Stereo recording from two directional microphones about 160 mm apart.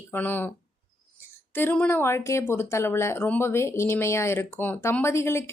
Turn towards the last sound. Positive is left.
turn(degrees=15)  # may be behind; listen again after turning